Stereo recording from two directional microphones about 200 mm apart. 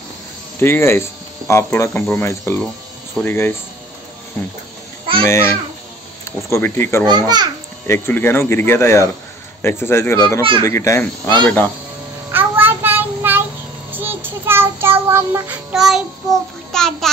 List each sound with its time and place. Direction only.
0.6 s speech: 10° left (ahead or behind)
5.2 s speech: 15° left (ahead or behind)
7.1 s a child's voice: 20° right (ahead or behind)
7.8 s speech: 10° left (ahead or behind)
12.3 s child singing: 10° right (ahead or behind)
16.7 s a child's voice: centre (ahead or behind)